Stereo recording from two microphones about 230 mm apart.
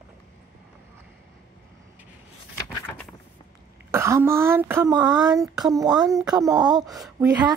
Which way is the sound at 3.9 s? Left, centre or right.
Centre.